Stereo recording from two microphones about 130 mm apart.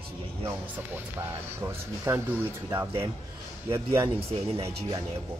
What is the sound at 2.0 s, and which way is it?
Speech, 20° right (ahead or behind).